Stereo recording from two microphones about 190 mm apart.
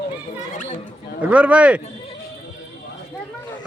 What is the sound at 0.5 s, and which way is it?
Speech, 40° left (ahead or behind).